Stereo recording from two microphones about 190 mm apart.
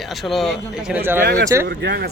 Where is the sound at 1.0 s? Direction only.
10° right (ahead or behind).